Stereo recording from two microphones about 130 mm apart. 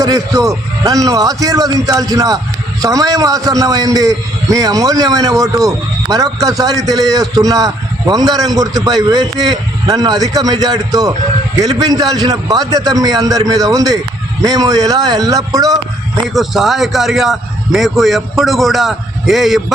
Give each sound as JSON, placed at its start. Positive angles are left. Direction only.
{"t": 0.0, "sound": "a man's voice", "side_deg": -25}
{"t": 16.3, "sound": "a man's voice", "side_deg": 0}